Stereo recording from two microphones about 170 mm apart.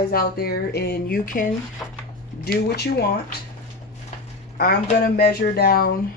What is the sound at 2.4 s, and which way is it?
Speech, 70° left (ahead or behind).